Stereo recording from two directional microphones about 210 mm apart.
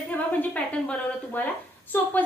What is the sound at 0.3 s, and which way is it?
A woman's voice, 5° left (ahead or behind).